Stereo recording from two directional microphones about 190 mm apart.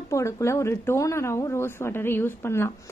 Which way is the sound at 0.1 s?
15° left (ahead or behind).